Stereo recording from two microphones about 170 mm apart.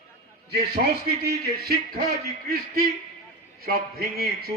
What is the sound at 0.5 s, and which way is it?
A man's voice, 65° right (ahead or behind).